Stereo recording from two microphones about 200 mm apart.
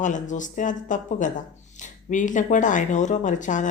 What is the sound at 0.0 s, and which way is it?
A woman's voice, 40° left (ahead or behind).